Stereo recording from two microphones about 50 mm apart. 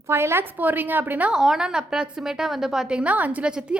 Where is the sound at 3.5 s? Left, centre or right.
Centre.